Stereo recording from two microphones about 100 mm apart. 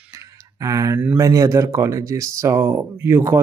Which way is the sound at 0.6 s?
35° right (ahead or behind).